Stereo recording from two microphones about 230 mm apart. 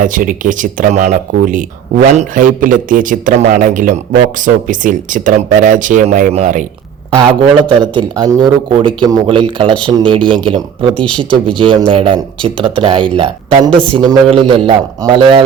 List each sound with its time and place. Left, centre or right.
0.0 s speech: right
7.2 s a man's voice: centre